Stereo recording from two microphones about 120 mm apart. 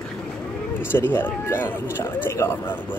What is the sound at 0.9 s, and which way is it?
Speech, 15° left (ahead or behind).